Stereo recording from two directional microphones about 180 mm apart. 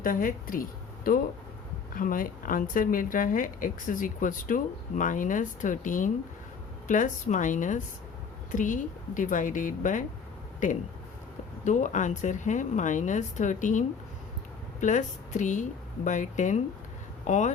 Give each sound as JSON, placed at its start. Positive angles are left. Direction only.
{"t": 0.0, "sound": "speech", "side_deg": 50}